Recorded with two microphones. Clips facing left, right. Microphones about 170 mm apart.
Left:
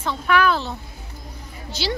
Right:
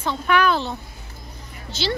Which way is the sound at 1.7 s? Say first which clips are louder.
Right 1 dB; 10° left (ahead or behind).